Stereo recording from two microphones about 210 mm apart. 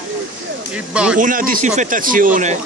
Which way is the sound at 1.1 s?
40° right (ahead or behind).